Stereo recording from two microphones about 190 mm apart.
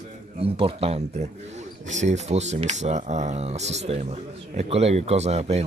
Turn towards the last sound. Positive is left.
turn(degrees=-35)  # may be behind; listen again after turning